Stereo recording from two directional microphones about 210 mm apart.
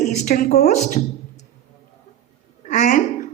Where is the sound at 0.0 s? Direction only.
40° left (ahead or behind).